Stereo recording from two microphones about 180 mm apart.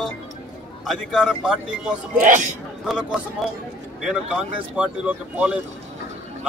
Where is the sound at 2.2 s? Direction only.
45° right (ahead or behind).